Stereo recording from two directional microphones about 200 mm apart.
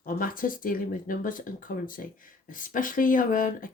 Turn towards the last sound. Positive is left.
turn(degrees=40)  # may be behind; listen again after turning